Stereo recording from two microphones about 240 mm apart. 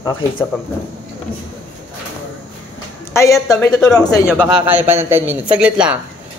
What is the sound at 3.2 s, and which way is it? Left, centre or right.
Speech, centre.